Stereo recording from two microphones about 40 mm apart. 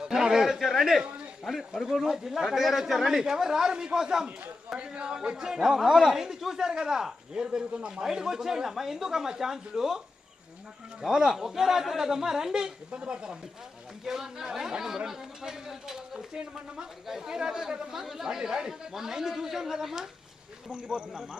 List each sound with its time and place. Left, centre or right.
0.0 s a sound: centre
1.5 s speech: centre
4.8 s speech: right
8.0 s speech: centre
11.0 s speech: centre
14.0 s speech: centre